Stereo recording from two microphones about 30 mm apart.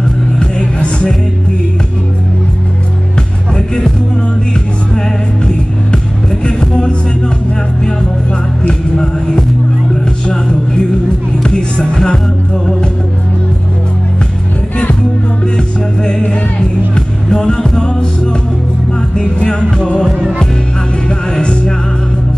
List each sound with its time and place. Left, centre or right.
0.4 s music: left
3.5 s music: left
6.4 s music: left
8.9 s music: left
11.4 s music: left
15.5 s music: left
19.1 s music: left